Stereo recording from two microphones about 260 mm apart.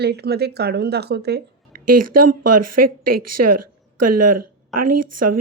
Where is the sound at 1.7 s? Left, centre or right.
Right.